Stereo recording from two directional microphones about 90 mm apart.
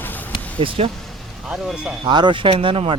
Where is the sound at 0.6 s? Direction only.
75° right (ahead or behind).